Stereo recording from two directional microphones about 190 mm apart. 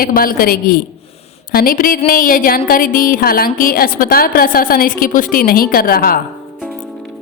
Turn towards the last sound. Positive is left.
turn(degrees=50)  # may be behind; listen again after turning